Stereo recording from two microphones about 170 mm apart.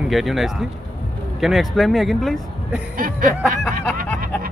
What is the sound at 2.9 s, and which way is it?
Music, 55° right (ahead or behind).